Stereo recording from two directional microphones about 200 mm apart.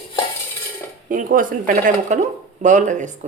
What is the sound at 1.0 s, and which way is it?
Speech, 40° right (ahead or behind).